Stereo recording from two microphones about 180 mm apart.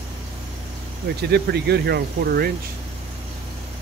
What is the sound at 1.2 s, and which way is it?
Speech, 65° right (ahead or behind).